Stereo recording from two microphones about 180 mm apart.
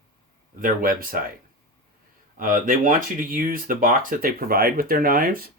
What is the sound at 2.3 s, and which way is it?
Speech, 50° right (ahead or behind).